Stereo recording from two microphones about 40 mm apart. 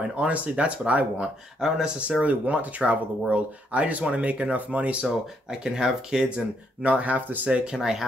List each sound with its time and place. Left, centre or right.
0.2 s speech: right
1.9 s speech: right
2.2 s speech: right
5.0 s speech: centre; by 7.4 s right
7.4 s speech: right
7.7 s speech: centre